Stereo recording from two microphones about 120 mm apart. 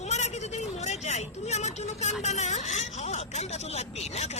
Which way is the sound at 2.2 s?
70° left (ahead or behind).